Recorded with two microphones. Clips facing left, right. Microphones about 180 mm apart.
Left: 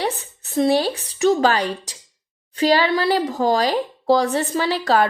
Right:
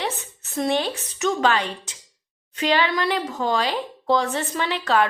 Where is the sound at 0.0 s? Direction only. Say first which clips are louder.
Left 4 dB; 35° left (ahead or behind).